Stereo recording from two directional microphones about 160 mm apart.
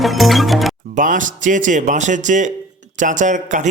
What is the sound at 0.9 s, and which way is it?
A man's voice, 55° right (ahead or behind).